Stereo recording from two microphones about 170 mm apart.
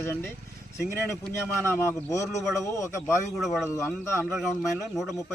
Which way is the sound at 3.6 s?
15° left (ahead or behind).